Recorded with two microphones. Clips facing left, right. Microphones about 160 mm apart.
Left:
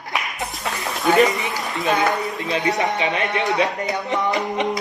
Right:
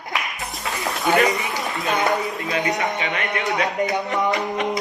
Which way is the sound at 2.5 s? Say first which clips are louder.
Left 3 dB; 25° left (ahead or behind).